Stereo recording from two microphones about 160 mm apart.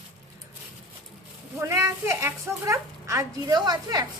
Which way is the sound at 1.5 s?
15° right (ahead or behind).